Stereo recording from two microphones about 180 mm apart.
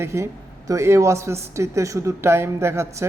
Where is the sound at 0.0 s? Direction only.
15° right (ahead or behind).